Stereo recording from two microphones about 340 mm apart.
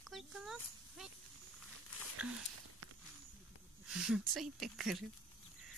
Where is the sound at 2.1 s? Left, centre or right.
Right.